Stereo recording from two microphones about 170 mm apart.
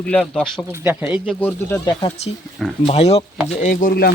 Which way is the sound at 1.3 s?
10° left (ahead or behind).